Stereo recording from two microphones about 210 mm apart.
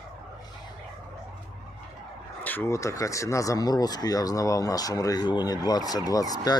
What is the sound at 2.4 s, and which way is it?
Speech, 10° left (ahead or behind).